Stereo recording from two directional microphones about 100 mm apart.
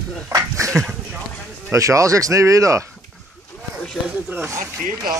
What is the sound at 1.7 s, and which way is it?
Speech, 30° right (ahead or behind).